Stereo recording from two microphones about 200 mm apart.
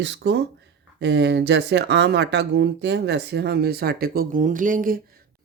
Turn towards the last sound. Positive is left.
turn(degrees=-40)  # may be behind; listen again after turning